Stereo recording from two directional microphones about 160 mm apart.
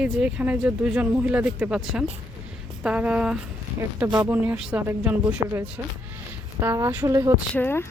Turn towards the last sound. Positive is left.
turn(degrees=15)  # may be behind; listen again after turning